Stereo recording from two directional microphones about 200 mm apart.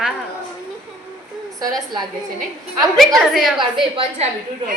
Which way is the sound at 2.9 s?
Centre (ahead or behind).